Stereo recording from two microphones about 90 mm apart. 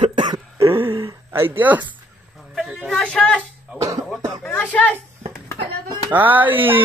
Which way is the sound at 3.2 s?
15° left (ahead or behind).